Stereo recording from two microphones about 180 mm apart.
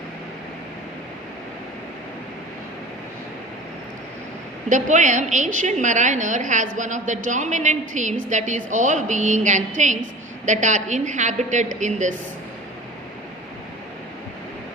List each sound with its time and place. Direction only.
4.7 s a woman's voice: 45° right (ahead or behind)